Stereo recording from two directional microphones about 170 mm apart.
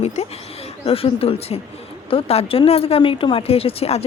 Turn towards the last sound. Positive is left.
turn(degrees=35)  # may be behind; listen again after turning